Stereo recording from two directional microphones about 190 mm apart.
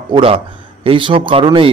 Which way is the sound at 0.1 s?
30° right (ahead or behind).